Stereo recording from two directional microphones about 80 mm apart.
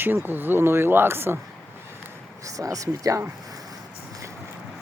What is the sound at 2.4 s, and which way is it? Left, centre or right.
Speech, right.